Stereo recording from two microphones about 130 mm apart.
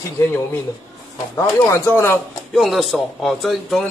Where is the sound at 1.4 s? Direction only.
20° left (ahead or behind).